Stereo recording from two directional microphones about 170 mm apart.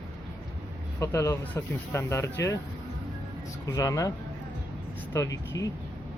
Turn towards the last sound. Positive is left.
turn(degrees=20)  # may be behind; listen again after turning